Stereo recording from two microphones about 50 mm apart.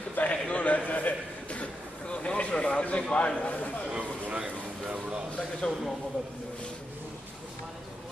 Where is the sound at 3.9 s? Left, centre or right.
Right.